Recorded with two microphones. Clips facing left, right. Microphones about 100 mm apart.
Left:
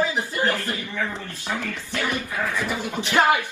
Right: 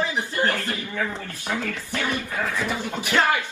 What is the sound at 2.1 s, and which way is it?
Speech, 15° left (ahead or behind).